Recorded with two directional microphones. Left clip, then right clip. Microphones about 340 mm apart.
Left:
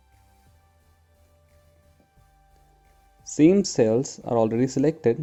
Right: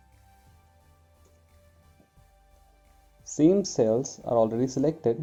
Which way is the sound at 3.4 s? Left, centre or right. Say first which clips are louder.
Left 3 dB; left.